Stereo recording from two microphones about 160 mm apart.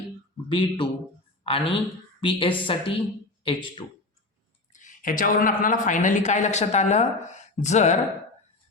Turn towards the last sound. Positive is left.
turn(degrees=45)  # may be behind; listen again after turning